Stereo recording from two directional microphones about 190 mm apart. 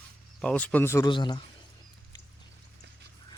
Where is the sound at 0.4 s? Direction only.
5° left (ahead or behind); by 1.4 s 25° left (ahead or behind).